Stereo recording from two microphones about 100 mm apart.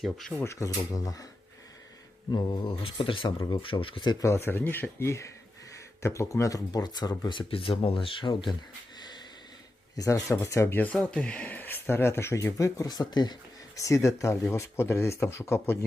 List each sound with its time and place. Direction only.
0.0 s speech: centre (ahead or behind)
0.4 s speech: 30° left (ahead or behind)
2.3 s speech: 50° left (ahead or behind)
3.3 s speech: 45° left (ahead or behind)
3.6 s speech: 60° left (ahead or behind)
4.2 s speech: 25° left (ahead or behind); by 7.2 s 40° left (ahead or behind)
7.3 s speech: 60° left (ahead or behind)
9.0 s snort: 45° left (ahead or behind)
10.0 s speech: 30° left (ahead or behind)
13.7 s speech: 30° left (ahead or behind)